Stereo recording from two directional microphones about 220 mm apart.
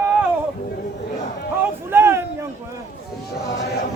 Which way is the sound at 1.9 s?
10° right (ahead or behind).